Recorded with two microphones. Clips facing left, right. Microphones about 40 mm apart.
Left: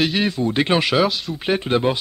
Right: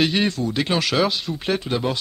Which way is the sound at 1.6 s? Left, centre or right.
Left.